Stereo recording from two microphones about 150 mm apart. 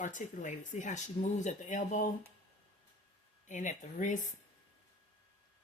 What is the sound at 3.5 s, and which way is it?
Speech, 55° left (ahead or behind).